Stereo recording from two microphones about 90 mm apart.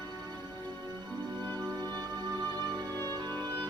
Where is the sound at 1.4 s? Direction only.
50° right (ahead or behind).